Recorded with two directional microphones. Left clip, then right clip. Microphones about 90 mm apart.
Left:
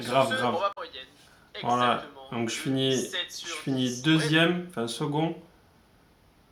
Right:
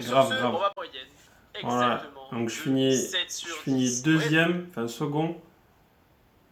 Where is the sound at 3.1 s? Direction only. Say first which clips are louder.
Right 3 dB; 50° right (ahead or behind).